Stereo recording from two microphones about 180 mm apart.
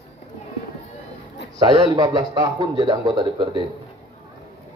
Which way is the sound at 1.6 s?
20° right (ahead or behind).